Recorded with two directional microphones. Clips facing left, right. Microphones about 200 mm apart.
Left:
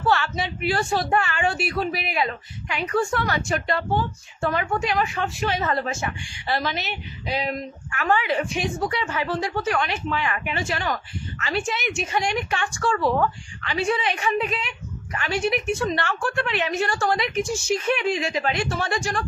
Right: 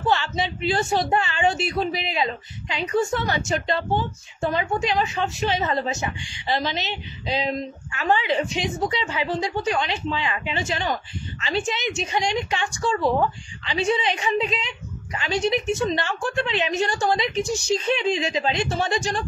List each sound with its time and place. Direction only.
0.0 s a woman's voice: 20° right (ahead or behind)